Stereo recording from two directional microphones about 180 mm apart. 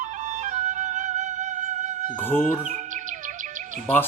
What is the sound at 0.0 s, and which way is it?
Music, 45° right (ahead or behind).